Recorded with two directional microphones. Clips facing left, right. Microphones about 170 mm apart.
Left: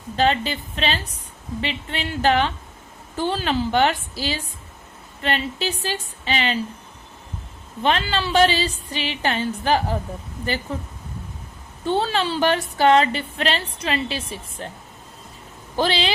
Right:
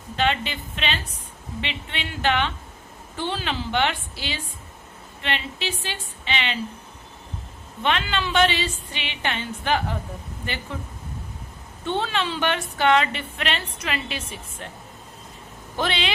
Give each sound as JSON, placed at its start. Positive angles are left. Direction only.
{"t": 0.2, "sound": "a woman's voice", "side_deg": 35}
{"t": 7.8, "sound": "a woman's voice", "side_deg": 35}
{"t": 11.9, "sound": "a woman's voice", "side_deg": 35}
{"t": 15.7, "sound": "speech", "side_deg": 30}